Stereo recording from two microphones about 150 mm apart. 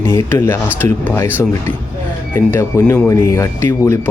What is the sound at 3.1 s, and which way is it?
Speech, 20° left (ahead or behind).